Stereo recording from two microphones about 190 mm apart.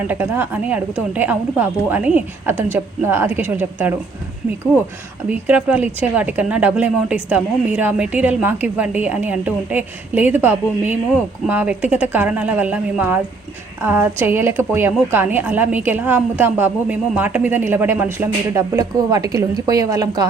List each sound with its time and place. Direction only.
0.1 s a woman's voice: 10° right (ahead or behind)
5.3 s a woman's voice: 5° right (ahead or behind)